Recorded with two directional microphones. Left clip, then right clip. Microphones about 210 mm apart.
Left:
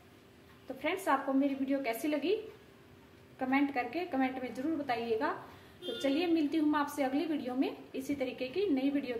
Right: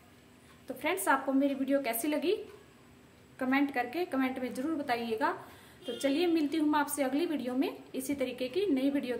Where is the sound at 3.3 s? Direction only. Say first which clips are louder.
Right 1 dB; 35° right (ahead or behind).